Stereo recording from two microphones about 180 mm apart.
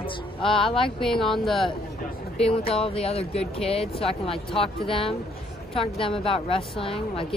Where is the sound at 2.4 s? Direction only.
35° left (ahead or behind).